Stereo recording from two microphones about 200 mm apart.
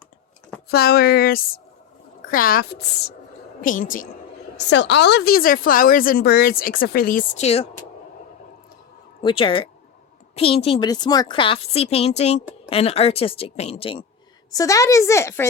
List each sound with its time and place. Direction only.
0.7 s a woman's voice: 50° left (ahead or behind)
4.5 s a woman's voice: 60° left (ahead or behind); by 7.7 s 30° left (ahead or behind)
9.2 s a woman's voice: 25° left (ahead or behind)
14.5 s a woman's voice: 15° left (ahead or behind)